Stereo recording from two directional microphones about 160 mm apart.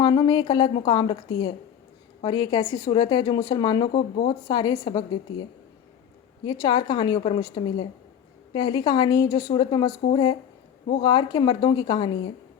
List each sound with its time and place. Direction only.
0.0 s a woman's voice: 30° left (ahead or behind)
6.4 s a woman's voice: 25° left (ahead or behind)